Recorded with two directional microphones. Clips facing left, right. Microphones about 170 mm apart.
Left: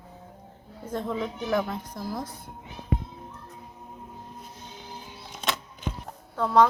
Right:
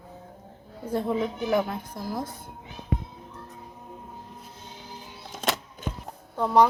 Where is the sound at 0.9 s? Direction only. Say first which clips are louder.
Right 4 dB; 15° right (ahead or behind).